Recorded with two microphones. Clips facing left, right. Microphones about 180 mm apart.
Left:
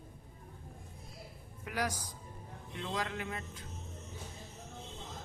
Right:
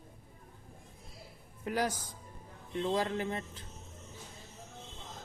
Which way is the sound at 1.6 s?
30° right (ahead or behind).